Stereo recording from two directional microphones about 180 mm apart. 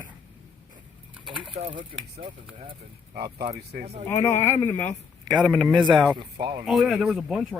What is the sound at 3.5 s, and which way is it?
Speech, 55° right (ahead or behind).